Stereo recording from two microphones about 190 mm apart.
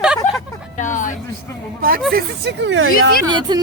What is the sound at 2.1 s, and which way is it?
Speech, 65° right (ahead or behind).